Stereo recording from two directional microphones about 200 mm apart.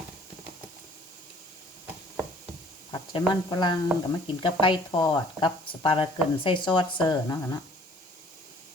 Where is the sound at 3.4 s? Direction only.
20° left (ahead or behind).